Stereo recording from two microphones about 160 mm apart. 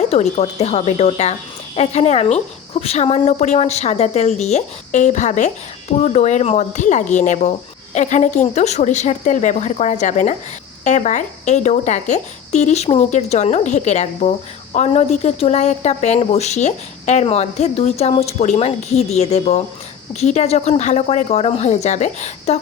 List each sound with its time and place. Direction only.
0.0 s speech: 45° left (ahead or behind)